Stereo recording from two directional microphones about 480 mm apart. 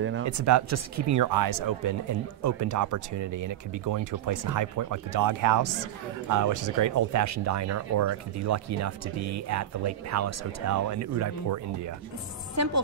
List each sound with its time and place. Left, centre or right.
0.3 s speech: right